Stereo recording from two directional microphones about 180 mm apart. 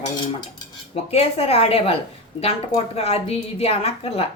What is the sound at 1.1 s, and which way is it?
A woman's voice, 35° left (ahead or behind).